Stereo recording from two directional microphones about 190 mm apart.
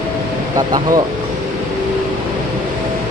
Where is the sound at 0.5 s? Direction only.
20° right (ahead or behind).